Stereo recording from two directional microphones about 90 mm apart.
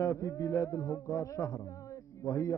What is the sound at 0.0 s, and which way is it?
Music, 35° left (ahead or behind).